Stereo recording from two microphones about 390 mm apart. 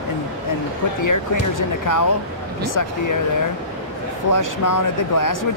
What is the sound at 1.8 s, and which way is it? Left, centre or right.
Speech, left.